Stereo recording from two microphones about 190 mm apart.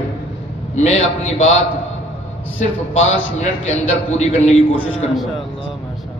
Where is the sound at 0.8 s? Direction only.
35° left (ahead or behind).